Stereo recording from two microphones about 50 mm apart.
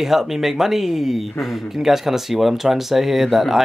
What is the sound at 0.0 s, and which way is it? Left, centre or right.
Speech, centre.